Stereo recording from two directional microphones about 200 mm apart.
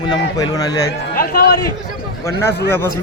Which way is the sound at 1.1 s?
45° left (ahead or behind).